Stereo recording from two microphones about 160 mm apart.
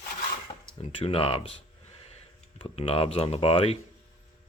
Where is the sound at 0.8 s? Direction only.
40° left (ahead or behind).